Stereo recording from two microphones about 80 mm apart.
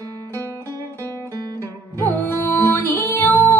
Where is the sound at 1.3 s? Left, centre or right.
Right.